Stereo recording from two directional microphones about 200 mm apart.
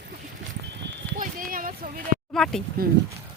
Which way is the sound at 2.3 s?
Centre (ahead or behind).